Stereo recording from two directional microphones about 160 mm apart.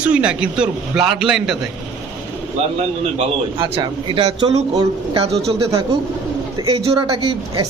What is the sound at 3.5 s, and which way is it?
Speech, 30° right (ahead or behind).